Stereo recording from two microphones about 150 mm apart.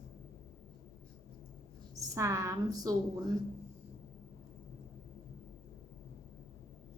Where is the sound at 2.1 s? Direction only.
20° right (ahead or behind).